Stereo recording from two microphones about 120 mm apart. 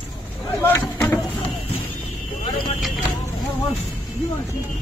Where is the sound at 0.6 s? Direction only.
20° left (ahead or behind).